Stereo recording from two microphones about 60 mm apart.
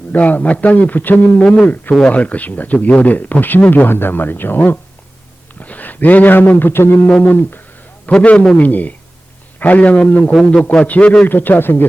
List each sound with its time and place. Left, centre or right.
0.1 s speech: left
8.0 s a man's voice: left
10.3 s a man's voice: centre
11.3 s speech: left